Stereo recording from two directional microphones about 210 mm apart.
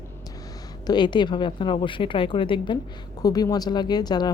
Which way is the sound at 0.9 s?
20° left (ahead or behind).